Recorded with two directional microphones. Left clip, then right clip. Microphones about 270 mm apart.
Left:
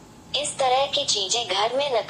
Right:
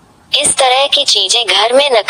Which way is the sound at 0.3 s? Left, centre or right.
Right.